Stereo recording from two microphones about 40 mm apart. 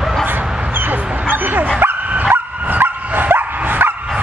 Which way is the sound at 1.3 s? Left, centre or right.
Right.